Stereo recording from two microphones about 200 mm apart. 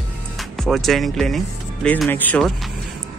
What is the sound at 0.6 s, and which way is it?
Speech, centre (ahead or behind).